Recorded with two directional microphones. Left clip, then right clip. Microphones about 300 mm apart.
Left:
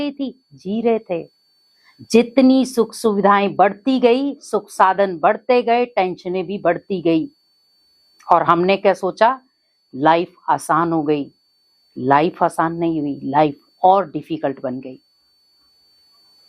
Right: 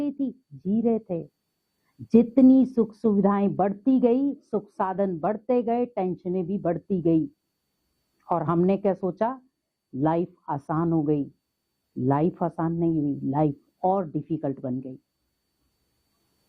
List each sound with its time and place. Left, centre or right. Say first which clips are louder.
0.0 s a woman's voice: left 5 dB; centre
12.9 s a woman's voice: left 4 dB; left
13.3 s a woman's voice: left 13 dB; centre